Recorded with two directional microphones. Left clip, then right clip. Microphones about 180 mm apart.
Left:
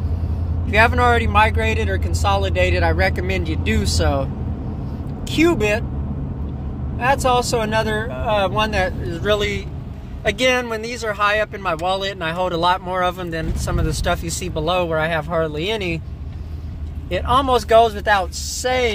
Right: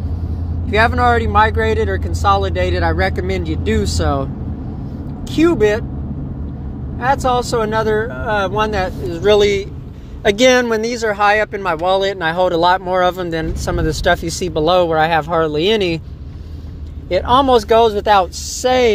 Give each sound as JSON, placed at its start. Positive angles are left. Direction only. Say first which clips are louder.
{"t": 0.7, "sound": "speech", "louder": "right 2 dB", "side_deg": -10}
{"t": 5.3, "sound": "speech", "louder": "right 4 dB", "side_deg": -10}
{"t": 7.0, "sound": "speech", "louder": "right 1 dB", "side_deg": -10}
{"t": 9.1, "sound": "speech", "louder": "right 10 dB", "side_deg": -35}
{"t": 17.1, "sound": "speech", "louder": "right 5 dB", "side_deg": -30}
{"t": 18.0, "sound": "speech", "louder": "right 5 dB", "side_deg": -40}